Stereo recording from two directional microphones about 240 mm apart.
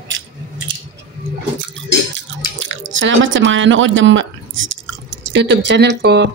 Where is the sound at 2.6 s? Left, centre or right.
Right.